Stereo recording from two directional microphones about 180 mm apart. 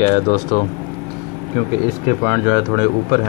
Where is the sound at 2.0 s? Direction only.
35° left (ahead or behind).